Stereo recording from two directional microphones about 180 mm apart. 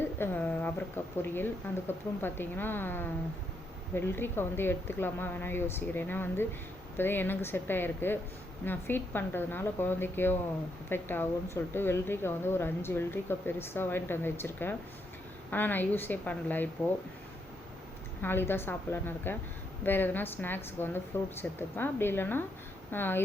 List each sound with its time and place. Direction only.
0.2 s a woman's voice: 10° left (ahead or behind)
18.2 s a woman's voice: 10° left (ahead or behind)